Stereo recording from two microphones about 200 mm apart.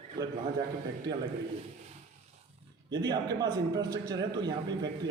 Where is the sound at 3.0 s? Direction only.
20° right (ahead or behind).